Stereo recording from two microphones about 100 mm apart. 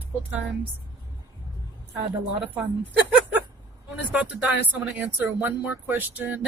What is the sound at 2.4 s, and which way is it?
Speech, 20° right (ahead or behind).